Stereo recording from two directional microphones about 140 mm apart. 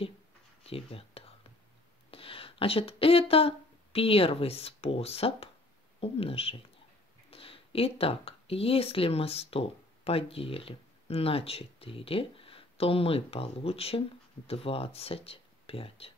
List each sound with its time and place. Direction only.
0.7 s speech: 40° left (ahead or behind)